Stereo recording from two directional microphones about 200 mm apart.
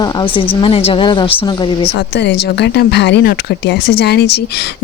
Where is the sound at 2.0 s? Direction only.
55° left (ahead or behind).